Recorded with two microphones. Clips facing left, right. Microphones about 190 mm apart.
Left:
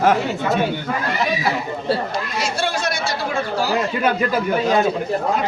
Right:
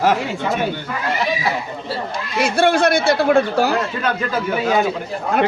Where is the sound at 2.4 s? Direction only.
55° right (ahead or behind).